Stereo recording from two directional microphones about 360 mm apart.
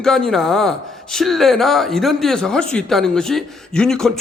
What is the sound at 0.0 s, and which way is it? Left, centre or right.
Speech, centre.